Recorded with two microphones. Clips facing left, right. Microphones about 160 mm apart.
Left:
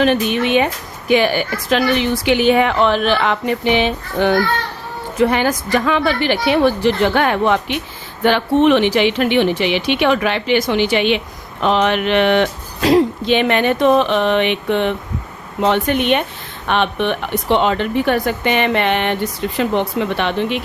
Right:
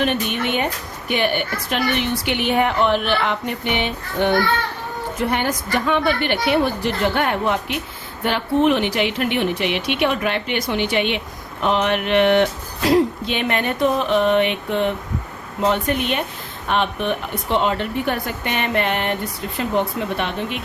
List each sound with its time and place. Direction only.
0.0 s a woman's voice: 90° left